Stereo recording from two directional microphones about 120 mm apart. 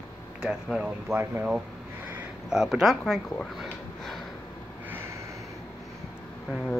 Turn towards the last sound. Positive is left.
turn(degrees=5)  # may be behind; listen again after turning